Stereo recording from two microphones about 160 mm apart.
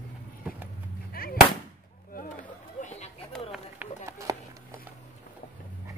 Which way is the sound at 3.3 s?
5° left (ahead or behind).